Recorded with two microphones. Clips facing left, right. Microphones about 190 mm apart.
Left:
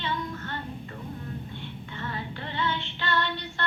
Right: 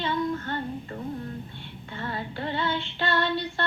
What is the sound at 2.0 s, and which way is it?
A woman's voice, 35° right (ahead or behind).